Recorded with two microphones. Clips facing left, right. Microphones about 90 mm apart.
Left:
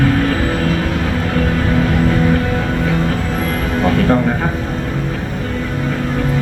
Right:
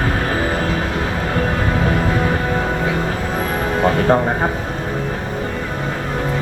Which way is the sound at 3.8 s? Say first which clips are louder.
Left 1 dB; 25° right (ahead or behind).